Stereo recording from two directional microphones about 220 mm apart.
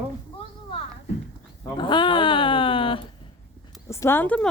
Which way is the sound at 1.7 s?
20° left (ahead or behind).